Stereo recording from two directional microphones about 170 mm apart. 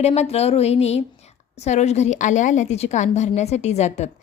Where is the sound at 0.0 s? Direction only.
40° left (ahead or behind).